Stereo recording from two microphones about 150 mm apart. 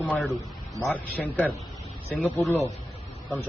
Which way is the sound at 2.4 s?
20° left (ahead or behind).